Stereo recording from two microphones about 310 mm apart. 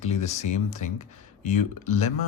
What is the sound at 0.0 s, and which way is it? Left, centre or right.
Speech, left.